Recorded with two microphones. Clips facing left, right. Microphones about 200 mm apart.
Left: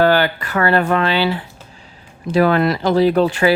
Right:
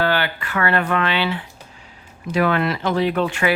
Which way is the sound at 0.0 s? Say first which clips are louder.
Left 6 dB; 40° left (ahead or behind).